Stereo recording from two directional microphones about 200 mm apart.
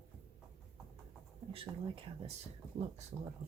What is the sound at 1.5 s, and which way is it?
Speech, 25° right (ahead or behind).